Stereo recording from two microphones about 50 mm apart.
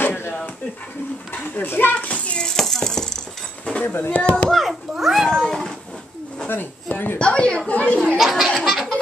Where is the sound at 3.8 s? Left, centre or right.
Left.